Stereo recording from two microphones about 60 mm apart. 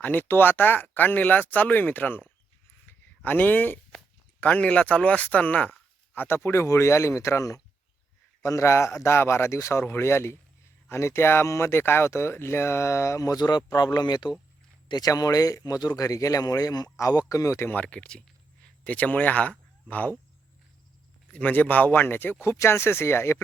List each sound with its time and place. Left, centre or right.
0.0 s speech: left
6.1 s speech: left
9.8 s speech: left
15.0 s speech: left
17.8 s speech: centre
21.3 s speech: left
22.4 s speech: left